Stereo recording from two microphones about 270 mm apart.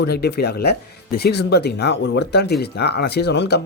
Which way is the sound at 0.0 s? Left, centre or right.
Left.